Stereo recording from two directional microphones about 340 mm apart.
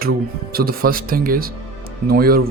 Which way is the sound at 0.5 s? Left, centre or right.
Right.